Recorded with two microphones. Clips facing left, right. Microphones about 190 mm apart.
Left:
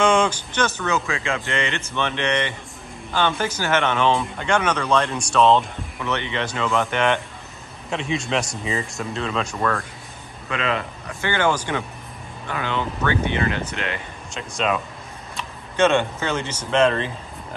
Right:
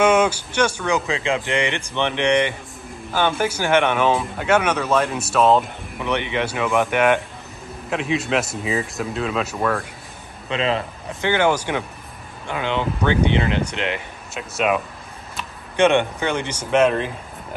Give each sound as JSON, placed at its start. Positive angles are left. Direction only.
{"t": 0.0, "sound": "speech", "side_deg": -10}
{"t": 5.9, "sound": "speech", "side_deg": -15}
{"t": 10.5, "sound": "speech", "side_deg": -30}
{"t": 11.1, "sound": "speech", "side_deg": -15}